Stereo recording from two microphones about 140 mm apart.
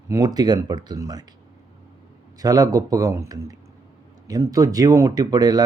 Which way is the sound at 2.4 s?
25° right (ahead or behind).